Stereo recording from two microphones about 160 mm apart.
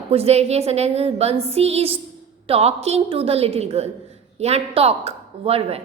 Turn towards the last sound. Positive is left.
turn(degrees=-40)  # may be behind; listen again after turning